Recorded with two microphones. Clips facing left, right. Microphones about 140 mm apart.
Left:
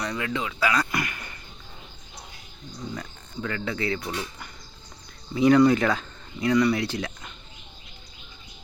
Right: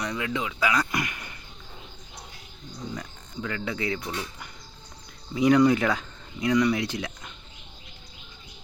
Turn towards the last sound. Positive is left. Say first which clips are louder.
# left 1 dB
turn(degrees=-15)  # may be behind; listen again after turning